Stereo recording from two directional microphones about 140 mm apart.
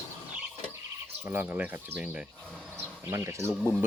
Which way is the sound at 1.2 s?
15° right (ahead or behind).